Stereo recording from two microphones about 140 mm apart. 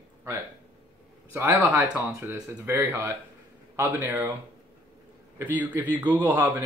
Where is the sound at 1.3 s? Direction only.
15° right (ahead or behind).